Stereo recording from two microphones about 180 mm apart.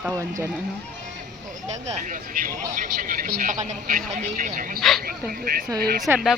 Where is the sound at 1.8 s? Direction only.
40° right (ahead or behind).